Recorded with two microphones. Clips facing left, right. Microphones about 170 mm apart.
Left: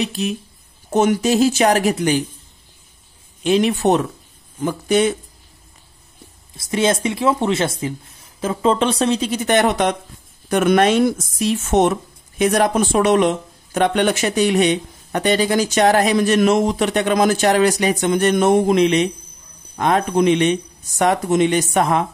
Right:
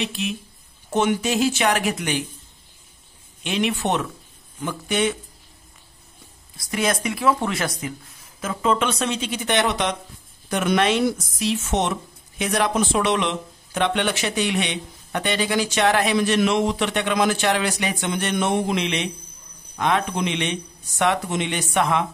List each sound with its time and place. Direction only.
0.0 s speech: 40° left (ahead or behind)
3.4 s speech: 35° left (ahead or behind)
6.5 s speech: 25° left (ahead or behind); by 22.0 s 40° left (ahead or behind)